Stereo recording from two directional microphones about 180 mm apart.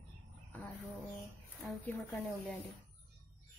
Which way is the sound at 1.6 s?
10° left (ahead or behind).